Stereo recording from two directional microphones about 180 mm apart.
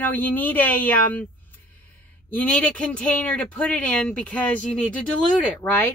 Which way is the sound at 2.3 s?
10° left (ahead or behind).